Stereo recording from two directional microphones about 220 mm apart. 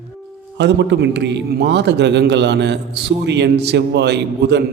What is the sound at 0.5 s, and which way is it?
A man's voice, 50° right (ahead or behind).